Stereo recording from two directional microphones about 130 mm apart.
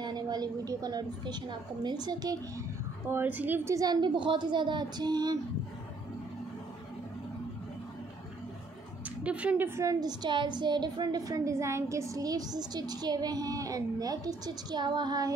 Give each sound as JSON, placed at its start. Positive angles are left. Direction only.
{"t": 0.0, "sound": "a woman's voice", "side_deg": -35}
{"t": 3.1, "sound": "a woman's voice", "side_deg": -15}
{"t": 9.2, "sound": "a woman's voice", "side_deg": -10}
{"t": 9.8, "sound": "a woman's voice", "side_deg": -30}